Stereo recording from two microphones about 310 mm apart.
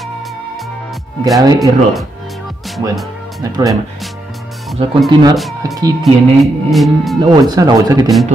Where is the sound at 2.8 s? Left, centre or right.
Centre.